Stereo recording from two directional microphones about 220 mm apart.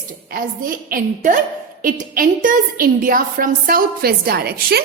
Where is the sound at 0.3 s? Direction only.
40° right (ahead or behind).